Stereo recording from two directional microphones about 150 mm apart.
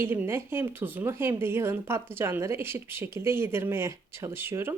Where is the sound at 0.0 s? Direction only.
15° right (ahead or behind).